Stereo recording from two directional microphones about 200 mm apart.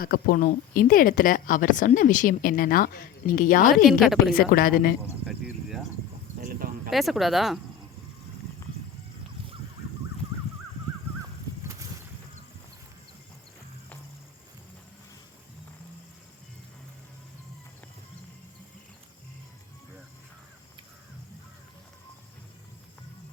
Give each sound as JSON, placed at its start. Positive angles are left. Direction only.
{"t": 0.0, "sound": "speech", "side_deg": 45}
{"t": 3.8, "sound": "speech", "side_deg": 0}
{"t": 4.4, "sound": "speech", "side_deg": 45}
{"t": 5.2, "sound": "insect", "side_deg": 0}
{"t": 6.4, "sound": "a sound", "side_deg": -45}
{"t": 6.9, "sound": "speech", "side_deg": 0}